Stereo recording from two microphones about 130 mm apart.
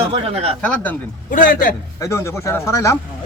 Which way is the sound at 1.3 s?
90° left.